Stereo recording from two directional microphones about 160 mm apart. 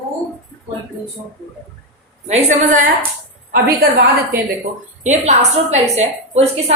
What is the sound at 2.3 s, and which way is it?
Speech, 50° right (ahead or behind).